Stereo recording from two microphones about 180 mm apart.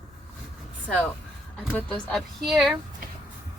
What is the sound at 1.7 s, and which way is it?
Speech, 5° left (ahead or behind).